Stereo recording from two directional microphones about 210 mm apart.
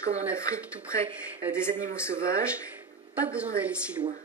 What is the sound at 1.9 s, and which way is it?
Speech, 10° left (ahead or behind).